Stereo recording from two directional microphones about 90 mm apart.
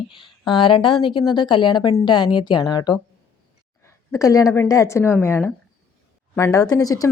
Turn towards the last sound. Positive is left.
turn(degrees=40)  # may be behind; listen again after turning